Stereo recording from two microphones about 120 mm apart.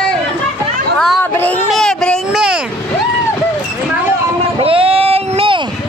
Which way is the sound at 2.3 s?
5° right (ahead or behind).